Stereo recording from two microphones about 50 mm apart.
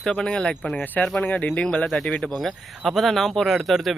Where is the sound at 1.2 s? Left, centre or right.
Left.